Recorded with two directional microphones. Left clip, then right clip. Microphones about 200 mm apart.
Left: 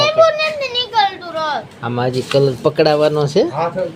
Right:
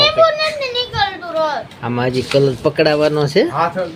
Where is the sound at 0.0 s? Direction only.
50° left (ahead or behind).